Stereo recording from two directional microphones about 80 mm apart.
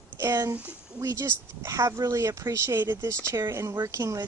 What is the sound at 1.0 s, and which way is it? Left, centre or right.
Speech, right.